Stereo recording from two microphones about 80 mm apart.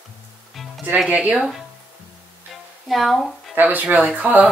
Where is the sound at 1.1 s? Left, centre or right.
Centre.